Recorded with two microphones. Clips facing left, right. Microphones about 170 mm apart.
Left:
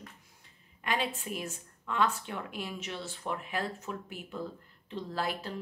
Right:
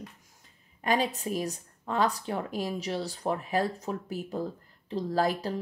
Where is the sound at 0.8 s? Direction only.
40° right (ahead or behind).